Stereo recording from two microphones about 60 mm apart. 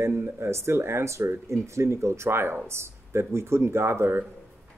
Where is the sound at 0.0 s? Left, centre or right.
Right.